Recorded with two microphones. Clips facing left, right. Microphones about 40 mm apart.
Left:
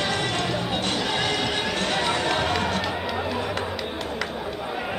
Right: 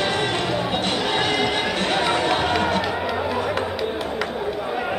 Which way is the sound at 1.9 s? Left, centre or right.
Centre.